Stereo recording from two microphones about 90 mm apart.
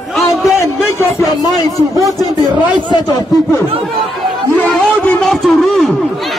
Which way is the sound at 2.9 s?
50° left (ahead or behind).